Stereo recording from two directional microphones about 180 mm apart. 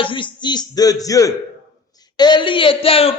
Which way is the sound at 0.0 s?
25° left (ahead or behind).